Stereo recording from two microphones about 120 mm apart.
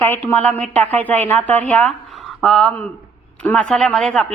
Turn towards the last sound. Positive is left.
turn(degrees=5)  # may be behind; listen again after turning